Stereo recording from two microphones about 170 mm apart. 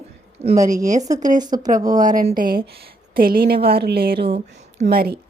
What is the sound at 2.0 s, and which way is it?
A woman's voice, 50° right (ahead or behind).